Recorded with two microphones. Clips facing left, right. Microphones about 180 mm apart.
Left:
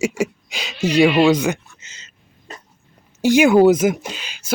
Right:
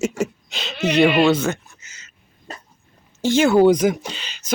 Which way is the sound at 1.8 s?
30° left (ahead or behind).